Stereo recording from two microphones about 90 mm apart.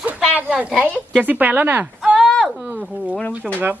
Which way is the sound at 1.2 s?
20° right (ahead or behind).